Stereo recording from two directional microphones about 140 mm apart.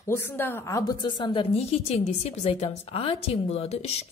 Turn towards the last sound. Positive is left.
turn(degrees=45)  # may be behind; listen again after turning